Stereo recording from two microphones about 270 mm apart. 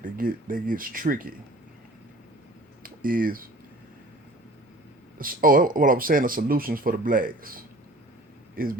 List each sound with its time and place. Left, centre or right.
0.0 s speech: right
2.8 s speech: right
5.1 s speech: right